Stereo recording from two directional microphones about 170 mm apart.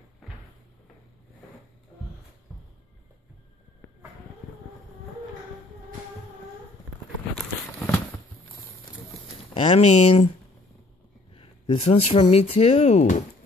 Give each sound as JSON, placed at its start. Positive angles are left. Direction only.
{"t": 9.5, "sound": "speech", "side_deg": 35}
{"t": 11.3, "sound": "speech", "side_deg": 30}